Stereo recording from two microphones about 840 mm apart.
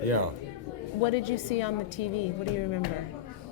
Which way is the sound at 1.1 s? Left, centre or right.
Left.